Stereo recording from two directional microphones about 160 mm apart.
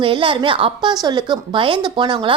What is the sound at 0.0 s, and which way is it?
A woman's voice, 35° right (ahead or behind).